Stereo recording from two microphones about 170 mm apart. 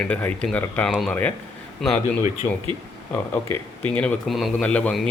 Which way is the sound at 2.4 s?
20° left (ahead or behind).